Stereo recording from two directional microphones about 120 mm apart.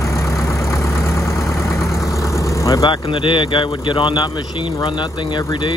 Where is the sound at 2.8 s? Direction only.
45° left (ahead or behind).